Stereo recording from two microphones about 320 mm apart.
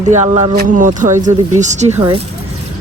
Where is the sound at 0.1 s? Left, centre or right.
Centre.